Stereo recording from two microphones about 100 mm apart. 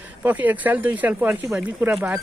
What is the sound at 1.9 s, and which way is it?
Speech, 5° right (ahead or behind).